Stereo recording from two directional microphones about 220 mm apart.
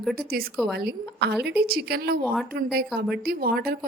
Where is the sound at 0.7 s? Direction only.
45° right (ahead or behind).